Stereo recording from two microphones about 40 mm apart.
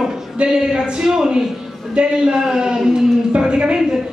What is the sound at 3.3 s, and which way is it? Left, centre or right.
Speech, right.